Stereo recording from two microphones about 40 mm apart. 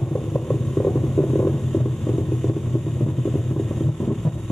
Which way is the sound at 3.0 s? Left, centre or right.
Centre.